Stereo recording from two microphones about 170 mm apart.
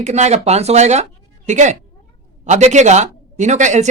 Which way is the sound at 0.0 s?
40° right (ahead or behind).